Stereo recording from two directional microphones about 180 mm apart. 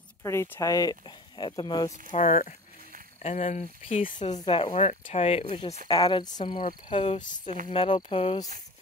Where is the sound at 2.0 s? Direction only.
45° left (ahead or behind).